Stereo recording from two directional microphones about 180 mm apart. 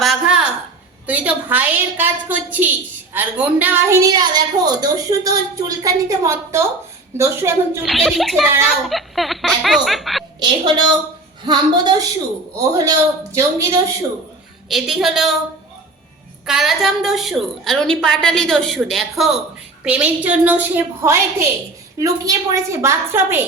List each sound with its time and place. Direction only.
0.0 s a sound: centre (ahead or behind)
1.0 s a woman's voice: 10° right (ahead or behind)
7.8 s a woman's voice: centre (ahead or behind)
11.4 s speech: 25° right (ahead or behind)
14.7 s a woman's voice: centre (ahead or behind)
16.5 s a woman's voice: centre (ahead or behind)